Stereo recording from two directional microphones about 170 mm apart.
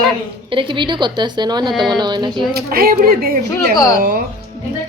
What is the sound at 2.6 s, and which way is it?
Speech, 60° right (ahead or behind).